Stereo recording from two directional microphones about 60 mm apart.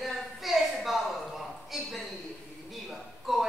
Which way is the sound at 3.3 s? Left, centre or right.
Centre.